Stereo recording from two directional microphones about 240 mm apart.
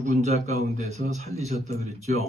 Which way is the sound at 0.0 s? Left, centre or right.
Right.